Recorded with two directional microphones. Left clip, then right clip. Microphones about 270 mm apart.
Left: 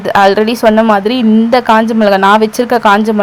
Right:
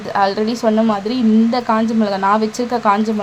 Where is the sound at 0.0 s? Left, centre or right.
Left.